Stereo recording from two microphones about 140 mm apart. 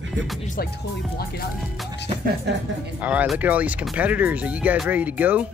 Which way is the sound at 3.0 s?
10° right (ahead or behind).